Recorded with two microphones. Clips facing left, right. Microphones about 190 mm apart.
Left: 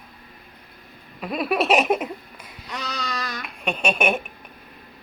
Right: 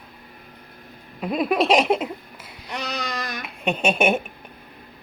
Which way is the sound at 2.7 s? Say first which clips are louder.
Right 2 dB; 60° right (ahead or behind).